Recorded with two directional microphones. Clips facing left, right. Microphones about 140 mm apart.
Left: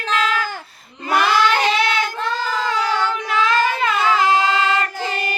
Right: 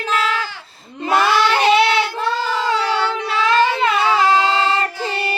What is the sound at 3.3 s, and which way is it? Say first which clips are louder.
Child singing: right 2 dB; 30° right (ahead or behind).